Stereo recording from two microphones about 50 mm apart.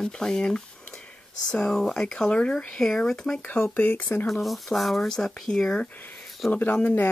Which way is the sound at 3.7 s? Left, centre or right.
Left.